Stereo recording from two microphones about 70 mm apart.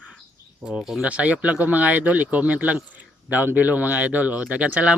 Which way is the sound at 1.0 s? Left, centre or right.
Centre.